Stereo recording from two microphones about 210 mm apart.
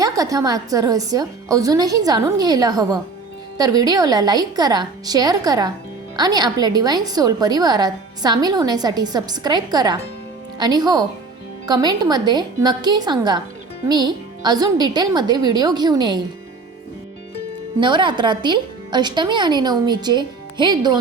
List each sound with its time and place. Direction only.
0.0 s a woman's voice: 15° right (ahead or behind)
17.7 s a woman's voice: 20° right (ahead or behind)